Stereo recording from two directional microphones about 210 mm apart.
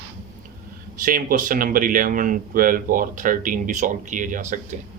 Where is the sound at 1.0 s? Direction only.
40° right (ahead or behind).